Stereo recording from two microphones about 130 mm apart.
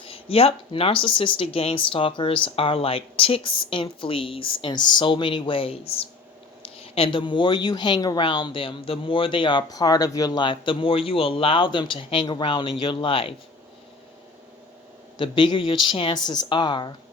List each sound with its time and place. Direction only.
0.0 s speech: 45° left (ahead or behind)
15.2 s speech: 40° left (ahead or behind)